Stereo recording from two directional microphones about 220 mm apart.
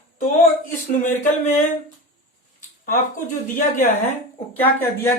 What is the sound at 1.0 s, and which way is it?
Speech, 10° left (ahead or behind).